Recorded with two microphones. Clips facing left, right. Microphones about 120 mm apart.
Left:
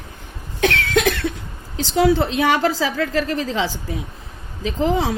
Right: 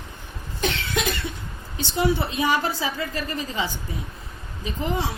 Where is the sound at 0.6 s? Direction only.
90° left.